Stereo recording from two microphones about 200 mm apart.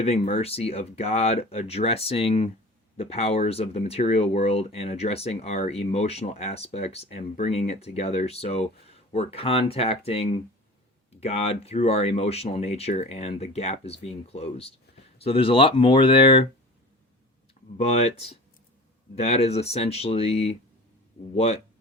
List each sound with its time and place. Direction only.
0.0 s speech: 30° left (ahead or behind)
17.7 s speech: 30° left (ahead or behind)